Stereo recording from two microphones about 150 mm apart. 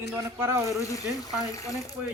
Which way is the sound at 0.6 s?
20° left (ahead or behind).